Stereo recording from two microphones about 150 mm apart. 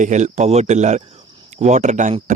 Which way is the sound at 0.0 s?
50° right (ahead or behind).